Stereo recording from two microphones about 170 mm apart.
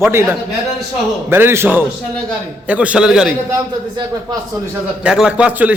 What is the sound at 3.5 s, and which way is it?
Speech, 25° right (ahead or behind).